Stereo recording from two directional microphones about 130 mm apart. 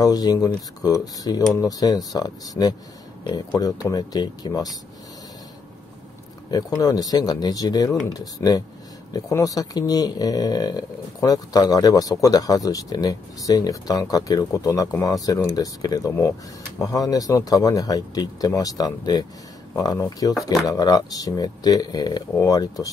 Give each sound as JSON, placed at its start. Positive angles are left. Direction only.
{"t": 0.0, "sound": "speech", "side_deg": 30}
{"t": 6.5, "sound": "speech", "side_deg": 30}